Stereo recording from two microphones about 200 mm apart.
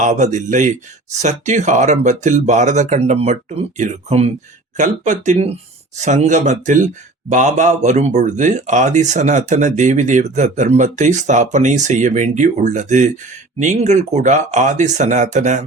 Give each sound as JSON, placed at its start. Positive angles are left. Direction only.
{"t": 0.0, "sound": "speech", "side_deg": -35}